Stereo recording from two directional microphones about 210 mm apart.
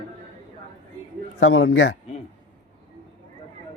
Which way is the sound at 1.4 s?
65° left (ahead or behind).